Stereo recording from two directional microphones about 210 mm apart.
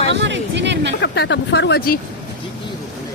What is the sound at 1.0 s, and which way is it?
Speech, 55° left (ahead or behind).